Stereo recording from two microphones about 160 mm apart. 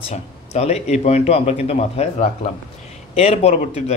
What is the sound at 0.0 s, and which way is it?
Speech, 40° left (ahead or behind).